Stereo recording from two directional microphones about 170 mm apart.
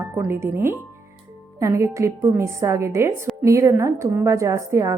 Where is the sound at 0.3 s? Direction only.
15° right (ahead or behind).